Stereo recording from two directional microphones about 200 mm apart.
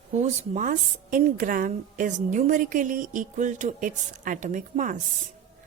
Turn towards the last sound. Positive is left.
turn(degrees=-40)  # may be behind; listen again after turning